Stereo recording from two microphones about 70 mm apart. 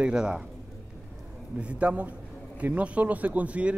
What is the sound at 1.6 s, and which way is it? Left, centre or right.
Speech, centre.